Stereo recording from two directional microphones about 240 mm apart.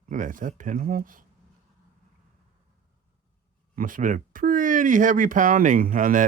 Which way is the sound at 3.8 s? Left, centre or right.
Right.